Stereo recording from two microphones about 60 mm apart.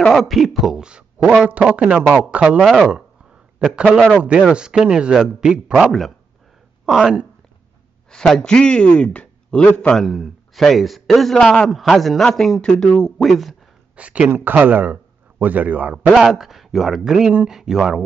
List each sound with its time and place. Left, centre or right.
0.3 s a man's voice: centre
0.8 s a sound: centre
1.4 s a man's voice: centre
2.6 s a man's voice: centre
4.2 s speech: centre
5.9 s a man's voice: centre
6.9 s speech: centre
8.1 s speech: centre
9.9 s a man's voice: centre
11.3 s a man's voice: centre
12.6 s speech: centre
13.2 s a man's voice: centre
13.9 s a man's voice: right
16.1 s a man's voice: centre